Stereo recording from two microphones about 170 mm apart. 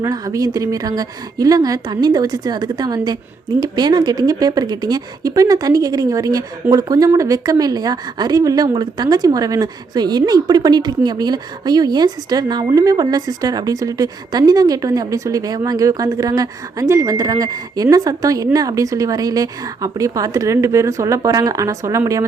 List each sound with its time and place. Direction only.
0.0 s speech: 20° right (ahead or behind)